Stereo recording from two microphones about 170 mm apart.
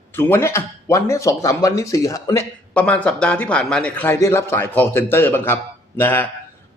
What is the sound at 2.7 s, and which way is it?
A man's voice, 5° left (ahead or behind).